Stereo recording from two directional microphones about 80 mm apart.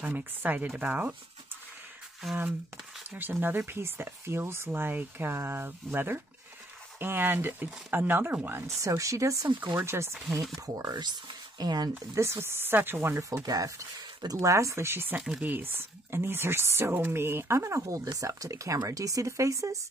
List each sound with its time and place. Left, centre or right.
0.0 s speech: right
3.1 s speech: right
8.6 s speech: right
10.8 s speech: right
12.1 s speech: right
13.2 s speech: right
15.1 s speech: centre
15.5 s speech: right